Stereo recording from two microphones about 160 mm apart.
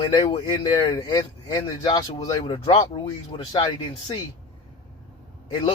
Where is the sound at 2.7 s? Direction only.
35° left (ahead or behind).